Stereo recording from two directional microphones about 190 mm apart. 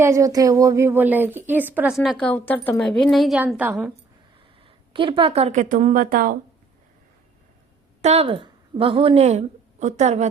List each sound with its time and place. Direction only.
0.0 s a woman's voice: 15° right (ahead or behind)
4.9 s a woman's voice: 25° right (ahead or behind); by 6.3 s 45° right (ahead or behind)
8.0 s a woman's voice: 35° right (ahead or behind)